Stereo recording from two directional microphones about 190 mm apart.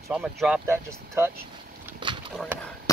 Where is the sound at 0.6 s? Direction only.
15° right (ahead or behind).